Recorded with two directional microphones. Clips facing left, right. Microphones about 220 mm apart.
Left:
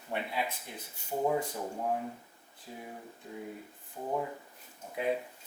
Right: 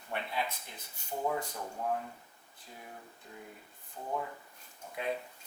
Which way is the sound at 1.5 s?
20° left (ahead or behind).